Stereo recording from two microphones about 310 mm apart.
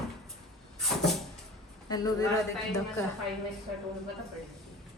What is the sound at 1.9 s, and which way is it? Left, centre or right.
Speech, centre.